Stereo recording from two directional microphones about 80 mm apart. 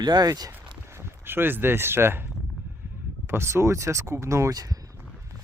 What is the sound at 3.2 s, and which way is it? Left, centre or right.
Speech, right.